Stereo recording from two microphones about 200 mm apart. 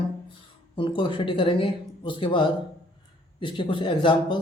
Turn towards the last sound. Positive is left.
turn(degrees=25)  # may be behind; listen again after turning